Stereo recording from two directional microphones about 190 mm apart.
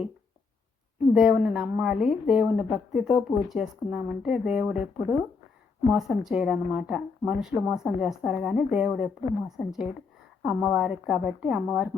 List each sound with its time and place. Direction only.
1.1 s a woman's voice: 5° right (ahead or behind)